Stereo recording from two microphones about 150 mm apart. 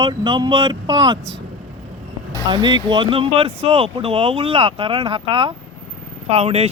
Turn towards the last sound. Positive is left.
turn(degrees=-45)  # may be behind; listen again after turning